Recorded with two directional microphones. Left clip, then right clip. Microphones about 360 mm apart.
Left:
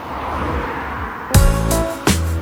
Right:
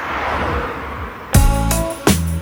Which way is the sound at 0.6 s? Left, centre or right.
Centre.